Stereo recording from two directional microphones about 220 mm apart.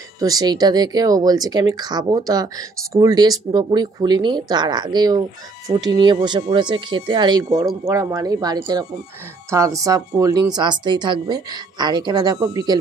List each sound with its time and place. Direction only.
0.2 s a woman's voice: 15° right (ahead or behind)